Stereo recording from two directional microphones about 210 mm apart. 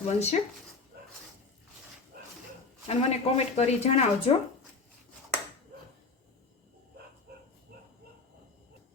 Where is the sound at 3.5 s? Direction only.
30° left (ahead or behind).